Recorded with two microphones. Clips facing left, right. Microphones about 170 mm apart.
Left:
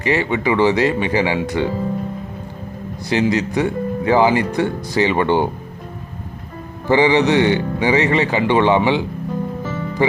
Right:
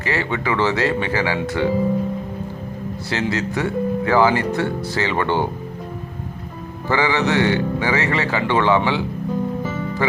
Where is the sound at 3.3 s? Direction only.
15° left (ahead or behind).